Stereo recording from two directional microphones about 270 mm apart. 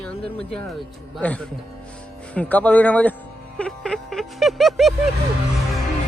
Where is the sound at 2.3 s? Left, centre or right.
Centre.